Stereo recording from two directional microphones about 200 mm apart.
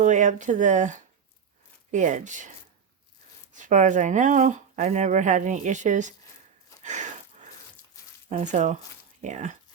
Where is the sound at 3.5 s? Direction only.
40° right (ahead or behind).